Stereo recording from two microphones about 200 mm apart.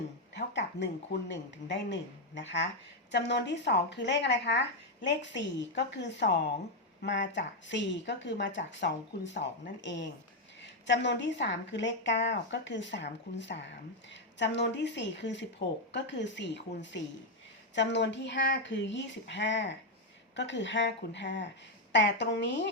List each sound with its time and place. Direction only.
0.3 s speech: 60° left (ahead or behind)
10.6 s speech: 60° left (ahead or behind)